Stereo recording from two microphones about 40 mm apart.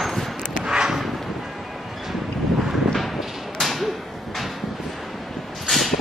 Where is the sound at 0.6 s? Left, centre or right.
Centre.